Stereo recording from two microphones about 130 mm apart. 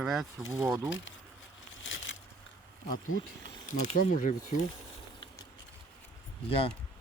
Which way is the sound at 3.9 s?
90° left.